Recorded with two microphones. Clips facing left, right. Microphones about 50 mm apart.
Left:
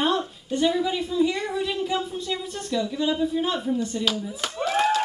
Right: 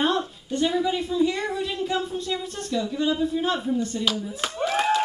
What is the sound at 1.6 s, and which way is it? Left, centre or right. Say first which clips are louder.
Speech: even; centre.